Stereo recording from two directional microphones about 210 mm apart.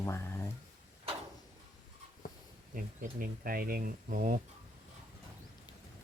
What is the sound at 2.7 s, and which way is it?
Speech, 40° right (ahead or behind).